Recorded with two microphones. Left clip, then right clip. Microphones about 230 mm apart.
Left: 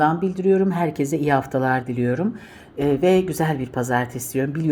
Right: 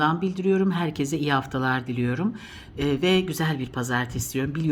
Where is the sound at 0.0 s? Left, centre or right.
Right.